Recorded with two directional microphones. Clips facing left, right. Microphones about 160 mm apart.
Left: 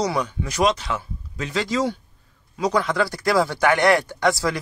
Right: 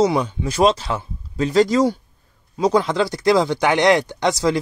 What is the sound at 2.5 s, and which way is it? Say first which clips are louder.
Speech: right 4 dB; 30° right (ahead or behind).